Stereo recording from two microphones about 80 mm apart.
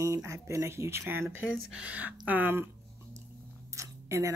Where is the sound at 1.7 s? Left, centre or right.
Centre.